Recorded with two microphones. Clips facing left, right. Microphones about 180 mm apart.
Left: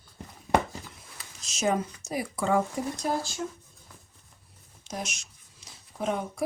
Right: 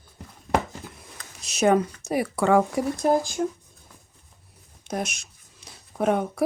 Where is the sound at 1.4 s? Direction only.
65° right (ahead or behind).